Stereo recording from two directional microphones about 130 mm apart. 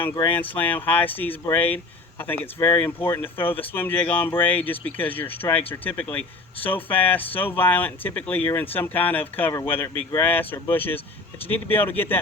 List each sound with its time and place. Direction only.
0.4 s speech: 15° left (ahead or behind)